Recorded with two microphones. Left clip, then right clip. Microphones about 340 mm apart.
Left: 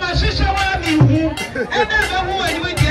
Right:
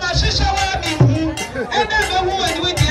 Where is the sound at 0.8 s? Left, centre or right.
Right.